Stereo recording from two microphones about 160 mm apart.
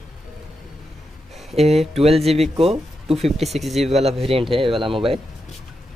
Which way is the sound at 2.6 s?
35° right (ahead or behind).